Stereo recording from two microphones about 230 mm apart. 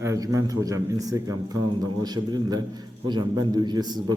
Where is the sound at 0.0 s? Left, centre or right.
Centre.